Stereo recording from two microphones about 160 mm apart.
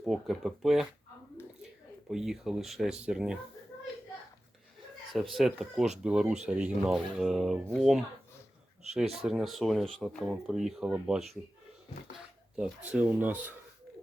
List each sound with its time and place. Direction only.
0.0 s speech: centre (ahead or behind)
2.0 s speech: centre (ahead or behind)
5.1 s speech: centre (ahead or behind)
12.9 s speech: 10° right (ahead or behind)